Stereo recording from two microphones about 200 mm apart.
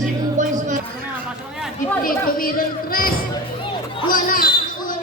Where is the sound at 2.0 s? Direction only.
45° left (ahead or behind).